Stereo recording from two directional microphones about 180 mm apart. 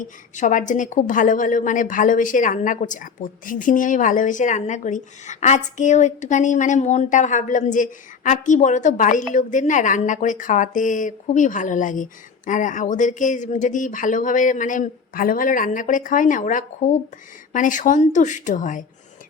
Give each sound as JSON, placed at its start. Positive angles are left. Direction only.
{"t": 0.0, "sound": "a woman's voice", "side_deg": 45}